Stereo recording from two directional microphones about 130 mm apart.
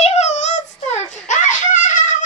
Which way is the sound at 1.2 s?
75° left (ahead or behind).